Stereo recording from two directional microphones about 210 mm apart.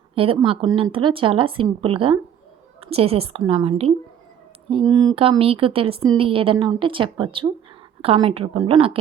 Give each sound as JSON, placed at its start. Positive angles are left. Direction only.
{"t": 0.1, "sound": "speech", "side_deg": -25}